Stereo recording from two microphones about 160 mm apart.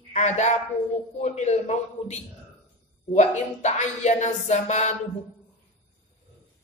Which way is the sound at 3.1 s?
45° left (ahead or behind).